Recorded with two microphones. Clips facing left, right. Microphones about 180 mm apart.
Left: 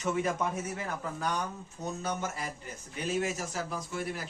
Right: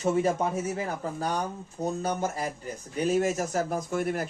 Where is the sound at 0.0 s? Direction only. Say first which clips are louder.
Right 5 dB; 35° right (ahead or behind).